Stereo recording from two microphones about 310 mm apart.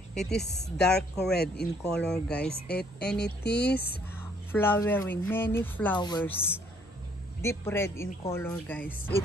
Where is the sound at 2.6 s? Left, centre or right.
Left.